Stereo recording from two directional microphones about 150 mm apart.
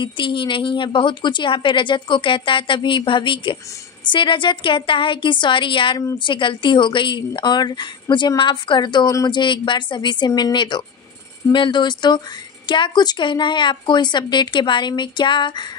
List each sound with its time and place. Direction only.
0.0 s speech: 35° left (ahead or behind)